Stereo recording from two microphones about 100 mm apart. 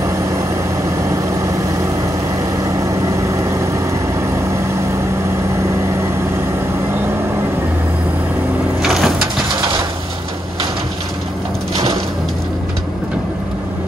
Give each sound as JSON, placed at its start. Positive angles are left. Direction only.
{"t": 0.0, "sound": "vehicle", "side_deg": -30}
{"t": 2.6, "sound": "vehicle", "side_deg": -30}
{"t": 8.8, "sound": "bird", "side_deg": -5}